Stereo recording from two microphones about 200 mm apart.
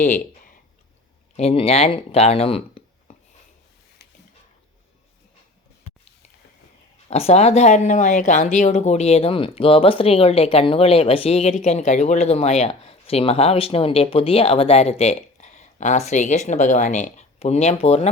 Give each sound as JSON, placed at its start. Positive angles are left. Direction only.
{"t": 0.0, "sound": "speech", "side_deg": 40}
{"t": 7.1, "sound": "speech", "side_deg": 30}